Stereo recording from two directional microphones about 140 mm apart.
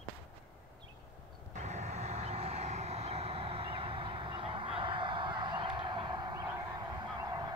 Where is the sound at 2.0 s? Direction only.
50° right (ahead or behind); by 6.3 s 35° right (ahead or behind).